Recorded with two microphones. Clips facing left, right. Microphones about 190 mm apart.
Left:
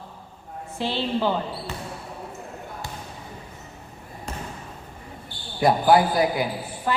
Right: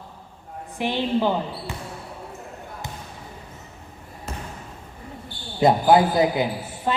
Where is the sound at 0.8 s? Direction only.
15° right (ahead or behind).